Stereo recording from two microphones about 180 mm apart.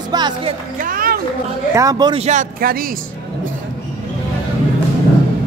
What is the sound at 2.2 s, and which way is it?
Speech, 40° right (ahead or behind).